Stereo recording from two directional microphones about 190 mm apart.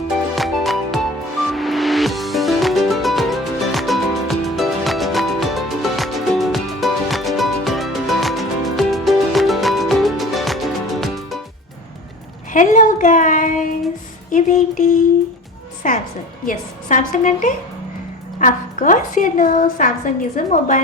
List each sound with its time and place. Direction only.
0.3 s music: centre (ahead or behind)
12.5 s a sound: 45° left (ahead or behind)
15.8 s a woman's voice: 40° left (ahead or behind)